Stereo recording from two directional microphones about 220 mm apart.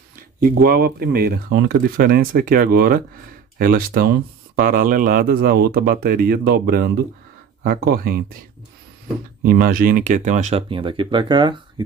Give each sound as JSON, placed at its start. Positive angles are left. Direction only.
{"t": 0.1, "sound": "speech", "side_deg": -40}
{"t": 9.4, "sound": "speech", "side_deg": -40}